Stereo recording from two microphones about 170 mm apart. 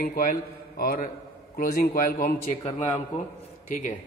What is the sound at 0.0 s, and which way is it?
A man's voice, 55° left (ahead or behind).